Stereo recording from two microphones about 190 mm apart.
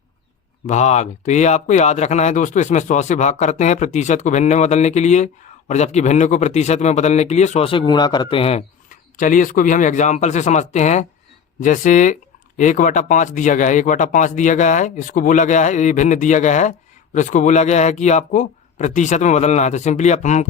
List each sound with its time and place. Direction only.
0.7 s speech: 40° left (ahead or behind)
9.1 s speech: 45° left (ahead or behind)